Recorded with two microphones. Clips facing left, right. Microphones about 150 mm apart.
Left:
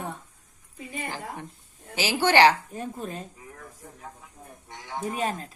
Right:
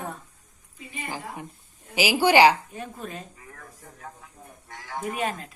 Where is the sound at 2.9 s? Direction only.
35° left (ahead or behind).